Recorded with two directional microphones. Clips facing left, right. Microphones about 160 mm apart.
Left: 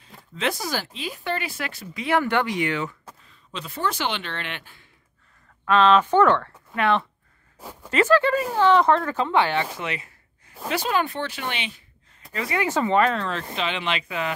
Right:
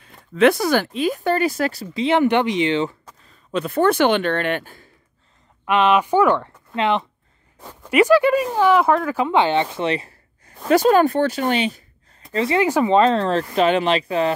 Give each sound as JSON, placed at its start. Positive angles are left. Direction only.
{"t": 0.3, "sound": "speech", "side_deg": -60}
{"t": 2.0, "sound": "speech", "side_deg": -20}
{"t": 3.3, "sound": "speech", "side_deg": -55}
{"t": 5.7, "sound": "speech", "side_deg": -15}
{"t": 7.5, "sound": "a sound", "side_deg": 10}
{"t": 7.9, "sound": "speech", "side_deg": -15}
{"t": 9.8, "sound": "gasp", "side_deg": -35}
{"t": 10.7, "sound": "speech", "side_deg": -45}
{"t": 12.3, "sound": "speech", "side_deg": -30}
{"t": 12.6, "sound": "speech", "side_deg": -15}